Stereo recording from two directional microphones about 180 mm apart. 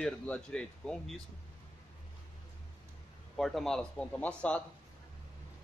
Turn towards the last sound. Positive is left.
turn(degrees=5)  # may be behind; listen again after turning